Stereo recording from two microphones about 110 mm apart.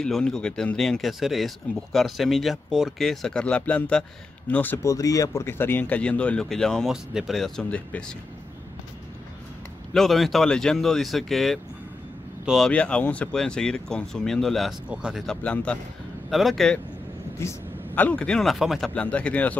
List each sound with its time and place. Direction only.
0.0 s speech: 5° left (ahead or behind)
4.8 s speech: 30° left (ahead or behind); by 8.0 s 10° left (ahead or behind)
9.9 s speech: centre (ahead or behind)
14.9 s speech: 10° right (ahead or behind)
15.2 s speech: 10° left (ahead or behind)
16.3 s speech: centre (ahead or behind)
17.4 s speech: 20° left (ahead or behind); by 18.9 s centre (ahead or behind)
18.9 s speech: 10° left (ahead or behind)